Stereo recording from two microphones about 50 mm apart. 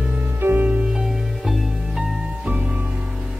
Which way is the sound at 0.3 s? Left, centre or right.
Right.